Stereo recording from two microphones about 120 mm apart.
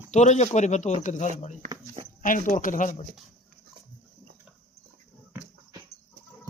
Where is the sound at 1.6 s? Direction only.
90° right.